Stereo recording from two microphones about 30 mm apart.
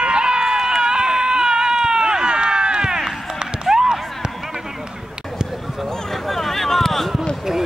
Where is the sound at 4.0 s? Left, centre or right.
Centre.